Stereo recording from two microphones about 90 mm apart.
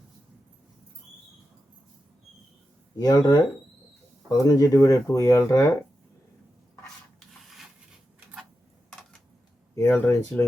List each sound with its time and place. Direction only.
3.0 s speech: 45° left (ahead or behind)
9.7 s speech: 25° left (ahead or behind)